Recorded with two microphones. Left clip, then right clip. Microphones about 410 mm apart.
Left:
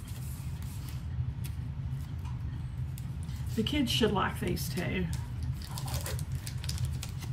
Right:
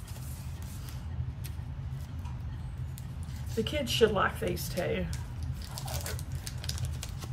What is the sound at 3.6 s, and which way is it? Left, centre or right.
Speech, centre.